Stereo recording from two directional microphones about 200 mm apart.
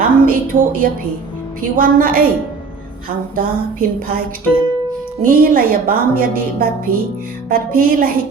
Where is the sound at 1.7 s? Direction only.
45° right (ahead or behind).